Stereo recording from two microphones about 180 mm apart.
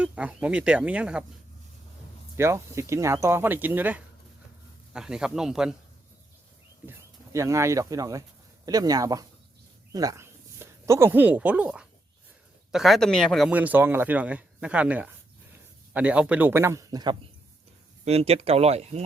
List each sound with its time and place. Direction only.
0.0 s speech: 5° right (ahead or behind)
2.3 s speech: 15° right (ahead or behind)
7.3 s speech: 15° right (ahead or behind)
18.0 s speech: 35° right (ahead or behind)